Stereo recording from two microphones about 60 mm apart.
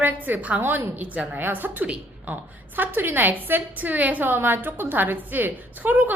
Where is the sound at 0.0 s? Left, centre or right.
Right.